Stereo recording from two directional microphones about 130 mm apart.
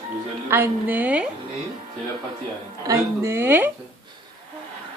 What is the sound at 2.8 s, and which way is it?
Speech, 20° right (ahead or behind).